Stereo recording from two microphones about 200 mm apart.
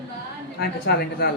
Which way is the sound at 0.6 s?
55° left (ahead or behind).